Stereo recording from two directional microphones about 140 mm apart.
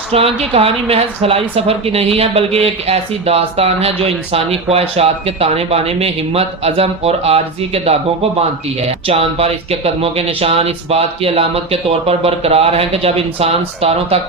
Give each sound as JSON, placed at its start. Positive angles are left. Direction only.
{"t": 0.1, "sound": "a woman's voice", "side_deg": -45}